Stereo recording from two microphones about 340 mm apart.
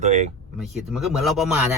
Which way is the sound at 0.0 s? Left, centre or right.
Centre.